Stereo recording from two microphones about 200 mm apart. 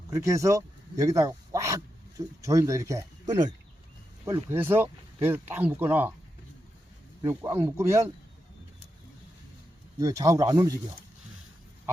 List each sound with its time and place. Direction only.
0.1 s speech: 15° right (ahead or behind)
4.5 s speech: 10° right (ahead or behind)
7.2 s speech: 15° right (ahead or behind)
10.0 s speech: 15° right (ahead or behind)